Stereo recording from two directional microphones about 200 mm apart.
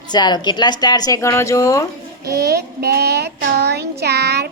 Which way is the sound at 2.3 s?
55° right (ahead or behind).